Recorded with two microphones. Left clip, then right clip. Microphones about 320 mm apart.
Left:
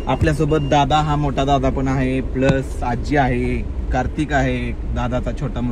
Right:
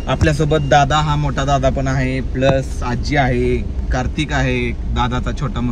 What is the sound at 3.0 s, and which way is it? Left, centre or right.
Speech, centre.